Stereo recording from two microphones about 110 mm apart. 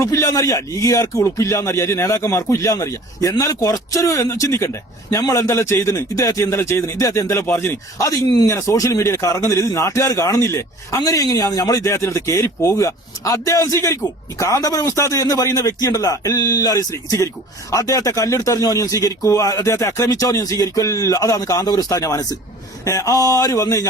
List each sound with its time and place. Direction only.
0.0 s a man's voice: 30° left (ahead or behind)